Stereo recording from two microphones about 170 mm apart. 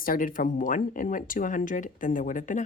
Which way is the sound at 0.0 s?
55° left (ahead or behind).